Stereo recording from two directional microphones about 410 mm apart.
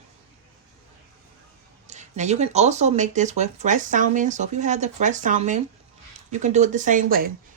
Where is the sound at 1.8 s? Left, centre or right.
Centre.